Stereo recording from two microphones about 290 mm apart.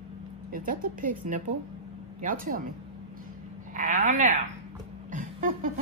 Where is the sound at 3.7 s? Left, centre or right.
Right.